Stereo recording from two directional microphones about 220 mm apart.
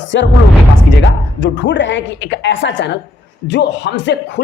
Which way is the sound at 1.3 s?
55° left (ahead or behind).